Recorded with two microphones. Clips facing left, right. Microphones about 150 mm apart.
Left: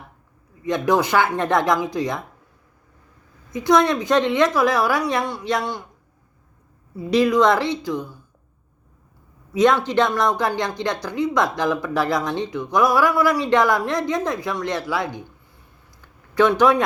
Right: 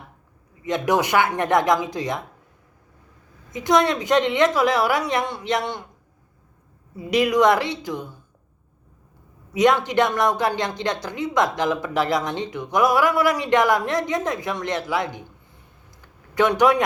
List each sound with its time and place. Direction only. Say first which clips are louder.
0.6 s speech: left 2 dB; 20° right (ahead or behind)
3.5 s speech: left 2 dB; 20° right (ahead or behind)
6.9 s speech: left 2 dB; 15° right (ahead or behind)
9.5 s speech: left 1 dB; 15° right (ahead or behind)
16.3 s speech: left 2 dB; 15° right (ahead or behind)